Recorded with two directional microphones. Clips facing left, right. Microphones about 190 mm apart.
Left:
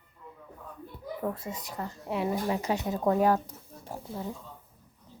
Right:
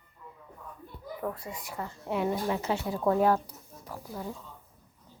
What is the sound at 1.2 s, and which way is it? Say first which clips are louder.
Speech: left 2 dB; 25° left (ahead or behind).